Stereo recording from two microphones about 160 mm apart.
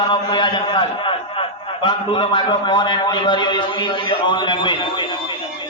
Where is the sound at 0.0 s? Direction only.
30° left (ahead or behind).